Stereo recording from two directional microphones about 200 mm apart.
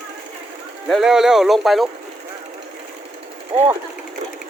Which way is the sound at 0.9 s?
Centre (ahead or behind).